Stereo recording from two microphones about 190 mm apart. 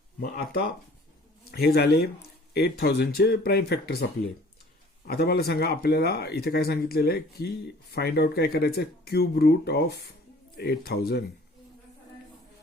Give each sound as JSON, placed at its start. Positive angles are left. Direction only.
{"t": 0.2, "sound": "speech", "side_deg": 55}
{"t": 5.0, "sound": "speech", "side_deg": 55}